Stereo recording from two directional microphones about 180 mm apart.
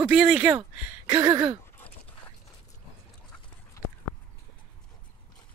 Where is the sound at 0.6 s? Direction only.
20° right (ahead or behind).